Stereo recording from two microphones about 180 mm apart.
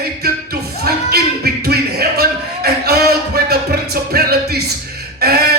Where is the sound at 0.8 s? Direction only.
60° right (ahead or behind).